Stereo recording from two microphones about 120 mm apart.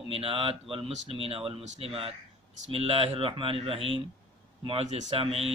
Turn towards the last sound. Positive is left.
turn(degrees=-50)  # may be behind; listen again after turning